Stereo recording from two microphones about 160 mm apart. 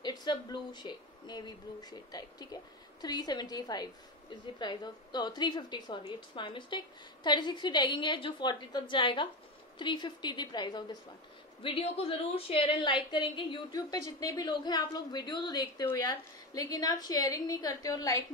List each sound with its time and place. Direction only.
0.0 s a woman's voice: 25° left (ahead or behind)
11.6 s a woman's voice: 35° left (ahead or behind); by 18.2 s 20° left (ahead or behind)